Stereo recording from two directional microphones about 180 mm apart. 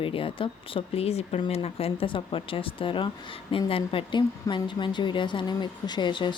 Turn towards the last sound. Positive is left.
turn(degrees=25)  # may be behind; listen again after turning